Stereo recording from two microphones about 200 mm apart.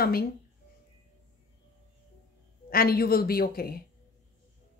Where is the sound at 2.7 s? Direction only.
50° left (ahead or behind).